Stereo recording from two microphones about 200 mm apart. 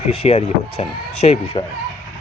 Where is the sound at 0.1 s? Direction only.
30° left (ahead or behind).